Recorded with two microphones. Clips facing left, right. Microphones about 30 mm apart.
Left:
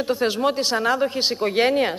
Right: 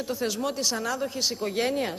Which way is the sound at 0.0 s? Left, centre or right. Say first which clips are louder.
Left 8 dB; left.